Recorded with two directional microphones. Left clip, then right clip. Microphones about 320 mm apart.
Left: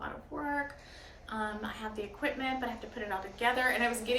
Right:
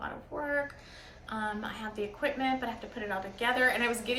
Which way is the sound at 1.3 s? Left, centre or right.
Centre.